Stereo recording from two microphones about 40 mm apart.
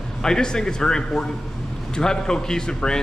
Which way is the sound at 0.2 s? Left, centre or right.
Centre.